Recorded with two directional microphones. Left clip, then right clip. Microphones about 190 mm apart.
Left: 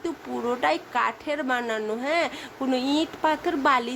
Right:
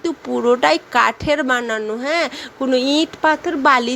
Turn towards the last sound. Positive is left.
turn(degrees=-20)  # may be behind; listen again after turning